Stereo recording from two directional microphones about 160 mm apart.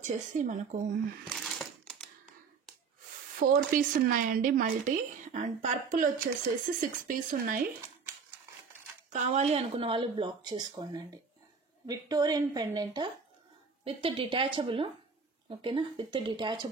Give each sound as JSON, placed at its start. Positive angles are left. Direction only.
{"t": 0.0, "sound": "speech", "side_deg": -50}
{"t": 1.2, "sound": "a sound", "side_deg": 0}
{"t": 3.3, "sound": "speech", "side_deg": -60}
{"t": 9.1, "sound": "speech", "side_deg": -45}